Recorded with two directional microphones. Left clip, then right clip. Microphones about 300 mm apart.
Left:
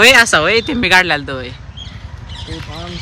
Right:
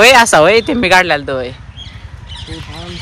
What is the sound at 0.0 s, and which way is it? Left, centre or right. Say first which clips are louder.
Speech: right 2 dB; centre.